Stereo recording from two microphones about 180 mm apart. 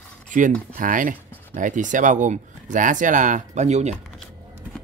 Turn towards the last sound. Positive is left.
turn(degrees=-40)  # may be behind; listen again after turning